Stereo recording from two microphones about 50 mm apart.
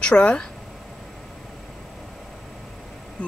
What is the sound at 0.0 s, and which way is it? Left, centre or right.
Speech, left.